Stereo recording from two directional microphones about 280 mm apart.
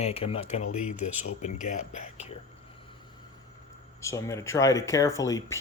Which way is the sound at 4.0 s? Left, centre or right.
Centre.